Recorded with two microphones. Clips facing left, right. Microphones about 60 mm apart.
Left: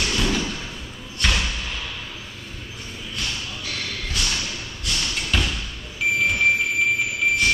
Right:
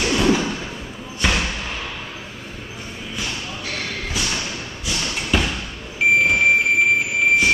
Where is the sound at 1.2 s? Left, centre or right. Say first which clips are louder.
Right 2 dB; centre.